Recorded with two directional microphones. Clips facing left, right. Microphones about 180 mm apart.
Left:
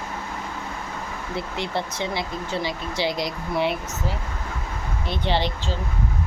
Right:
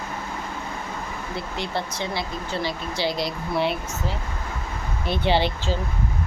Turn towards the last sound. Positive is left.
turn(degrees=-5)  # may be behind; listen again after turning